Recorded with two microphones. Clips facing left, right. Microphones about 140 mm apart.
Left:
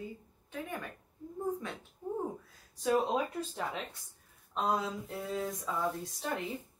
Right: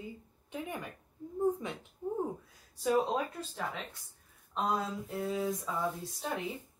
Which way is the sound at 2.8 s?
Centre (ahead or behind).